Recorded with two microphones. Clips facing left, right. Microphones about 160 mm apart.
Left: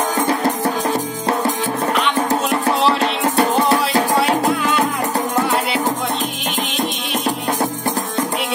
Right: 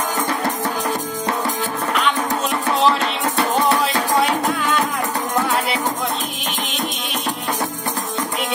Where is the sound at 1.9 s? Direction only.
Centre (ahead or behind).